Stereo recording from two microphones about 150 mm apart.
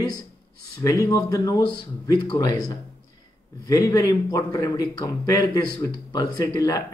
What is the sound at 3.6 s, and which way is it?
A man's voice, 25° left (ahead or behind).